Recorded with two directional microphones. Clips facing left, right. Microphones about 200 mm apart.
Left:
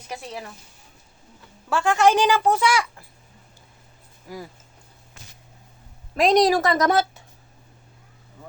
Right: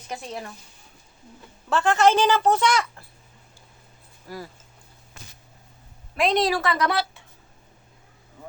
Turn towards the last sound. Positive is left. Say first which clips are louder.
# left 4 dB
turn(degrees=40)  # may be behind; listen again after turning